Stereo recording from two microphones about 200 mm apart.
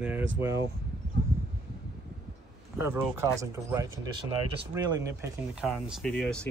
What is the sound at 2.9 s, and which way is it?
Speech, 15° right (ahead or behind).